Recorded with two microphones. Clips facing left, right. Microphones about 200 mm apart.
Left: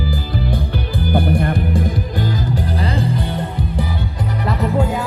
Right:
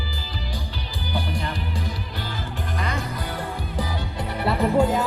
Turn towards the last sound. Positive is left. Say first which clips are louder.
# left 1 dB
turn(degrees=0)  # may be behind; listen again after turning